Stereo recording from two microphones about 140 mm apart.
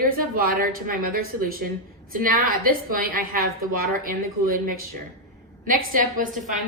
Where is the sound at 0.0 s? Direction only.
90° right.